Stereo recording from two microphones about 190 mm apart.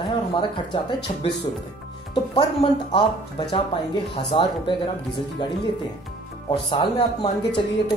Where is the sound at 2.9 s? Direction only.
25° left (ahead or behind).